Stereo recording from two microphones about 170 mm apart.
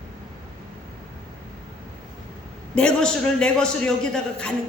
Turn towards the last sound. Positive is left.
turn(degrees=5)  # may be behind; listen again after turning